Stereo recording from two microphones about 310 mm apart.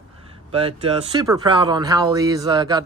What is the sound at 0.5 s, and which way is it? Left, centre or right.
Speech, centre.